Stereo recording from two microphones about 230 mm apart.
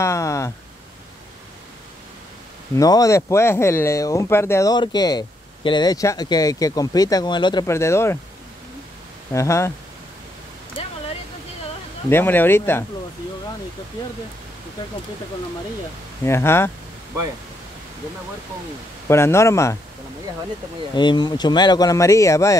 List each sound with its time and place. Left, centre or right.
0.0 s a sound: centre
2.7 s speech: centre
9.3 s speech: centre
12.1 s speech: centre
16.3 s speech: centre
19.0 s speech: centre
20.9 s speech: centre